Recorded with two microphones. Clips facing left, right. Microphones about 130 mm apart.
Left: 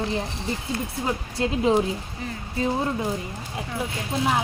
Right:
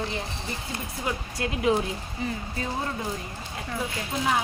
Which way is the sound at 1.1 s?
30° left (ahead or behind).